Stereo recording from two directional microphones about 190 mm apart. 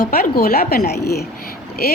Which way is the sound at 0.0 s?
50° left (ahead or behind).